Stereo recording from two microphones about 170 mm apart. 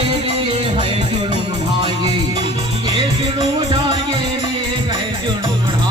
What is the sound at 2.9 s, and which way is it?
Music, 35° right (ahead or behind).